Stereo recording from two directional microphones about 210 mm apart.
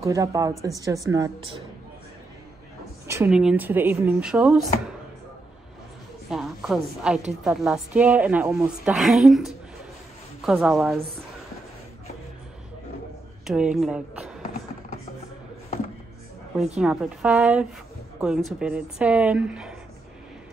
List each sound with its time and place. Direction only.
0.0 s speech: 15° right (ahead or behind)
3.1 s speech: 5° right (ahead or behind)
6.3 s a woman's voice: centre (ahead or behind)
13.5 s a woman's voice: 5° right (ahead or behind)
16.7 s a woman's voice: 5° right (ahead or behind)